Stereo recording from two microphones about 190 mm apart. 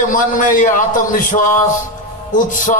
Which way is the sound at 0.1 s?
45° left (ahead or behind).